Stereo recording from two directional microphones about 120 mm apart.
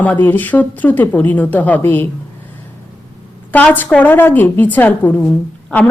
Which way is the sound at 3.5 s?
15° left (ahead or behind).